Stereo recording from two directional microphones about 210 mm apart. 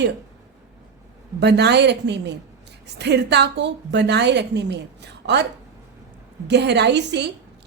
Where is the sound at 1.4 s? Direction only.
50° right (ahead or behind).